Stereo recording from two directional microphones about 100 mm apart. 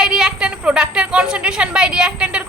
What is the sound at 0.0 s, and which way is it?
A woman's voice, 5° right (ahead or behind).